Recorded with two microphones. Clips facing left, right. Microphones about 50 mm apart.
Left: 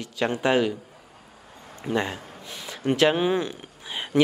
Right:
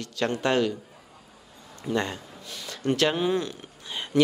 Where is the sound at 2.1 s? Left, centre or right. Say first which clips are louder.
Left 2 dB; left.